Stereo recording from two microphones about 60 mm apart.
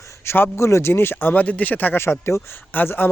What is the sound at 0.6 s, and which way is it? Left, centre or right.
Speech, left.